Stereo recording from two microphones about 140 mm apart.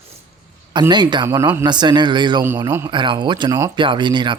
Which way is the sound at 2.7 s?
20° right (ahead or behind).